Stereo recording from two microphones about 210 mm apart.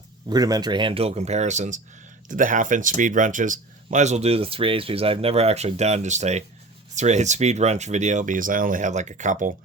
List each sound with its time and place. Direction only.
0.3 s speech: 20° right (ahead or behind); by 9.5 s 35° right (ahead or behind)